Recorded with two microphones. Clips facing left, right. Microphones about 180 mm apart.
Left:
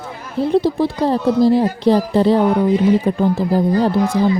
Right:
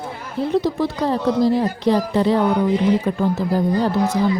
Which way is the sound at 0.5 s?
30° left (ahead or behind).